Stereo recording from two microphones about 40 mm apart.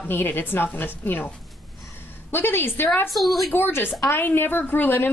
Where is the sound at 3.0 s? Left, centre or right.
Centre.